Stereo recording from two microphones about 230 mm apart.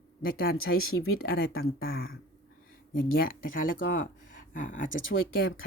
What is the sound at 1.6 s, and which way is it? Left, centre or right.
Speech, left.